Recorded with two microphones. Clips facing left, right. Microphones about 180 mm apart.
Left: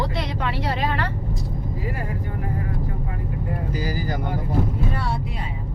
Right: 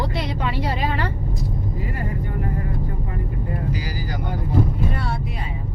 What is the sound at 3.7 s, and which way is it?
Vehicle, 50° left (ahead or behind).